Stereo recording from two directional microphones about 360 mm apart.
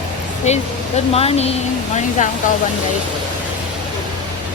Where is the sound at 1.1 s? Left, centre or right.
Centre.